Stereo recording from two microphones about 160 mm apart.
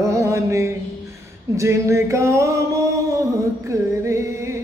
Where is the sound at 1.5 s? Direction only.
20° right (ahead or behind).